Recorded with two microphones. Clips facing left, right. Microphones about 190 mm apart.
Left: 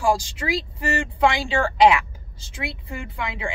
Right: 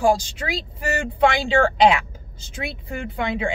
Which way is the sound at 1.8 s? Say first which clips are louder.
Even; 20° right (ahead or behind).